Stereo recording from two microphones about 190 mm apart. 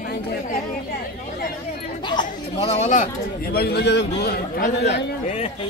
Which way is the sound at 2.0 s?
30° left (ahead or behind).